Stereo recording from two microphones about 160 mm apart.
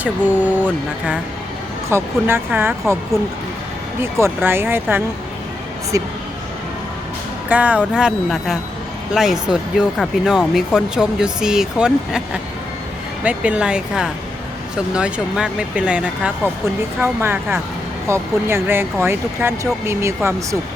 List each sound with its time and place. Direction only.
0.0 s speech: 10° right (ahead or behind)
4.0 s speech: 15° right (ahead or behind)
7.5 s speech: 10° right (ahead or behind)
13.2 s speech: 10° right (ahead or behind)